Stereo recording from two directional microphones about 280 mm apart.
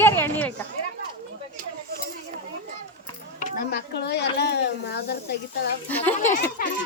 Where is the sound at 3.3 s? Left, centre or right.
Left.